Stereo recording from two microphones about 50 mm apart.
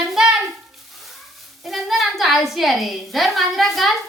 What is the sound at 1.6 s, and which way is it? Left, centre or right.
A woman's voice, centre.